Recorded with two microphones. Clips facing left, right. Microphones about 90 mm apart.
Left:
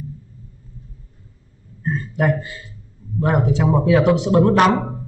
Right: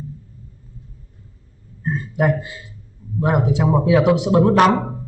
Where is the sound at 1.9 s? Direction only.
15° right (ahead or behind).